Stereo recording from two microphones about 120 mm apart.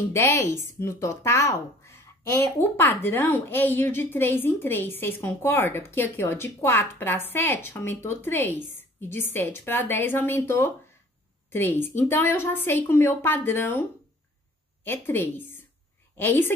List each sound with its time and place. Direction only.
0.1 s a woman's voice: 25° left (ahead or behind)